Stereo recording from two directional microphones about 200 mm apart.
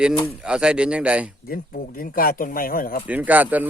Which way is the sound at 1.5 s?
45° left (ahead or behind).